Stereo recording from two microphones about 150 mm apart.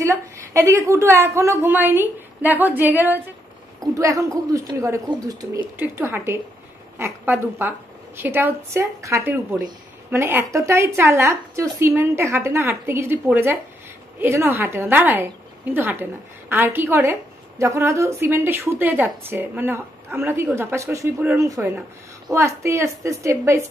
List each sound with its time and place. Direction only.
0.0 s a woman's voice: 20° right (ahead or behind)